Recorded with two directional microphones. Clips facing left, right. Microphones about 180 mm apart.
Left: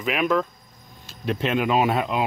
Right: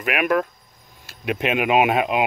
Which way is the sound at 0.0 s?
60° right (ahead or behind).